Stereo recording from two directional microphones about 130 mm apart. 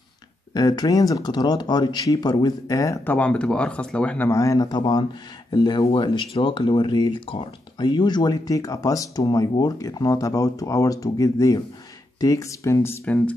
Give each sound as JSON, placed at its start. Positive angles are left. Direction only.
{"t": 0.6, "sound": "speech", "side_deg": 30}
{"t": 3.1, "sound": "speech", "side_deg": 10}
{"t": 4.3, "sound": "speech", "side_deg": 25}